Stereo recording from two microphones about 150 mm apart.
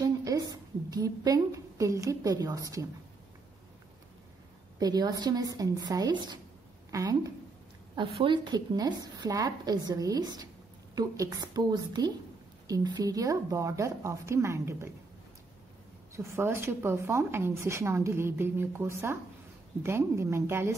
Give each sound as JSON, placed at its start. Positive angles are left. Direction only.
{"t": 0.0, "sound": "a sound", "side_deg": -25}
{"t": 4.7, "sound": "a woman's voice", "side_deg": -25}
{"t": 16.2, "sound": "a woman's voice", "side_deg": -15}